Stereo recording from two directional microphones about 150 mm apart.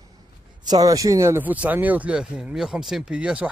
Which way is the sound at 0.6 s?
25° right (ahead or behind).